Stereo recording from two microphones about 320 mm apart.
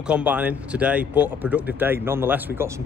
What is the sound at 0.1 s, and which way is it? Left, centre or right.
Speech, centre.